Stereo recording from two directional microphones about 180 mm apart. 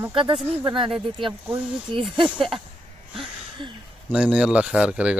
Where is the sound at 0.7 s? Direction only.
30° right (ahead or behind).